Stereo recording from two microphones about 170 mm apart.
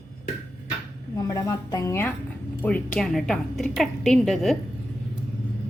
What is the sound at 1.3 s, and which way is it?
A woman's voice, 20° left (ahead or behind).